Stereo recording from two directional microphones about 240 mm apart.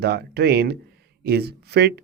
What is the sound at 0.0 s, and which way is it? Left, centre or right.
Speech, right.